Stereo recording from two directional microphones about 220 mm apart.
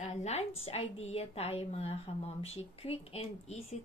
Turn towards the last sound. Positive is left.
turn(degrees=30)  # may be behind; listen again after turning